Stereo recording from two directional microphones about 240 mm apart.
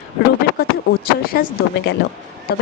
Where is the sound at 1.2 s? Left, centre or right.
Left.